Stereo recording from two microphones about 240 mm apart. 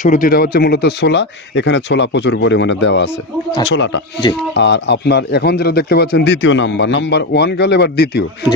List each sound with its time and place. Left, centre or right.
0.0 s a man's voice: left